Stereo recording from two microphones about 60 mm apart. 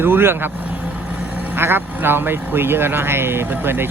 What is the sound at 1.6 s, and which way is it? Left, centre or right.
Speech, right.